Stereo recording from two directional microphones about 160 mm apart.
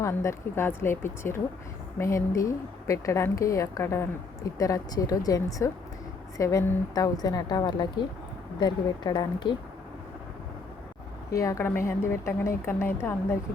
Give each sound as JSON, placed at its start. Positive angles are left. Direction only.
{"t": 0.0, "sound": "a woman's voice", "side_deg": 20}
{"t": 11.3, "sound": "a woman's voice", "side_deg": 20}